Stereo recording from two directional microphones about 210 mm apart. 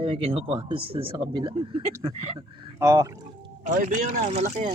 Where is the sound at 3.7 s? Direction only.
40° right (ahead or behind).